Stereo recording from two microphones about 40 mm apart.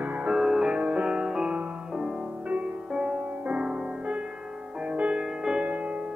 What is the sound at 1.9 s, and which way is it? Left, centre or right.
Music, centre.